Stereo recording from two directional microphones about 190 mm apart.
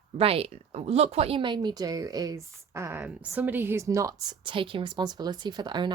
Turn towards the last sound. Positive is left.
turn(degrees=-20)  # may be behind; listen again after turning